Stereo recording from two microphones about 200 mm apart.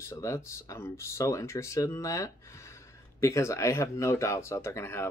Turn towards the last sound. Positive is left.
turn(degrees=10)  # may be behind; listen again after turning